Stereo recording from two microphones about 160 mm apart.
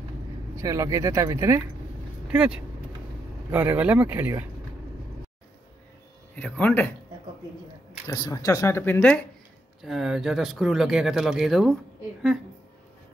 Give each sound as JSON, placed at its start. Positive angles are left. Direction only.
{"t": 0.6, "sound": "speech", "side_deg": -20}
{"t": 2.3, "sound": "speech", "side_deg": -5}
{"t": 6.3, "sound": "speech", "side_deg": 10}
{"t": 8.1, "sound": "speech", "side_deg": 20}
{"t": 9.8, "sound": "speech", "side_deg": 0}